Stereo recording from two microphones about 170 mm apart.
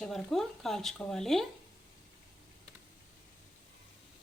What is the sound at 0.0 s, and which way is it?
Speech, centre (ahead or behind).